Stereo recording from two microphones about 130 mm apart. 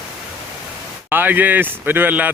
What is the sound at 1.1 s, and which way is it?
Speech, 15° right (ahead or behind).